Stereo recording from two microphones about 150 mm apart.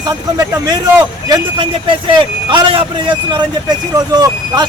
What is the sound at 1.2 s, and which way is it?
Speech, 35° right (ahead or behind).